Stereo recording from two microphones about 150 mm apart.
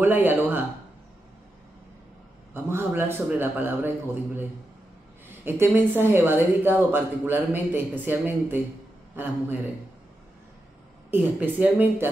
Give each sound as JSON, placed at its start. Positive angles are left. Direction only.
{"t": 0.0, "sound": "speech", "side_deg": -15}
{"t": 2.5, "sound": "speech", "side_deg": -15}
{"t": 11.1, "sound": "speech", "side_deg": -10}